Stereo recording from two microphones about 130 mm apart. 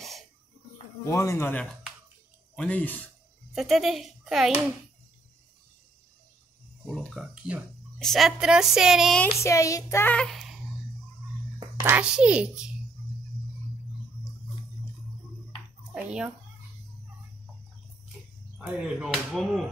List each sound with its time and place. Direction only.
1.0 s child singing: 20° left (ahead or behind)
2.5 s speech: 10° left (ahead or behind)
3.5 s a child's voice: centre (ahead or behind)
7.2 s a child's voice: 10° right (ahead or behind)
9.4 s child singing: 25° left (ahead or behind)
10.1 s a child's voice: centre (ahead or behind)
11.8 s a child's voice: 10° right (ahead or behind)
15.9 s a sound: 10° right (ahead or behind)
18.8 s a child's voice: 5° right (ahead or behind)